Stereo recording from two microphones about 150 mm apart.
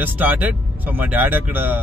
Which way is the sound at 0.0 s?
10° right (ahead or behind).